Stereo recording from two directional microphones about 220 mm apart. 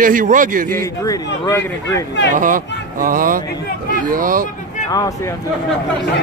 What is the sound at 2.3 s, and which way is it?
Speech, 35° right (ahead or behind).